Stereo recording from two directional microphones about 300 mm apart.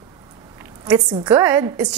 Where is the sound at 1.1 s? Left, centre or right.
Centre.